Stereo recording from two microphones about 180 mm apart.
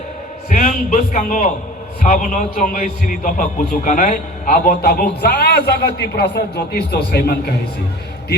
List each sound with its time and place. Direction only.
0.5 s a man's voice: 45° left (ahead or behind); by 7.5 s 60° left (ahead or behind)